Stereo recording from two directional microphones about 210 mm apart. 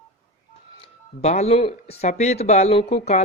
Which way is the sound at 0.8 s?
30° left (ahead or behind).